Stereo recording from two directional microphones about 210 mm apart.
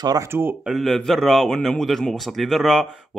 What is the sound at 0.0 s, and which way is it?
Speech, 15° right (ahead or behind).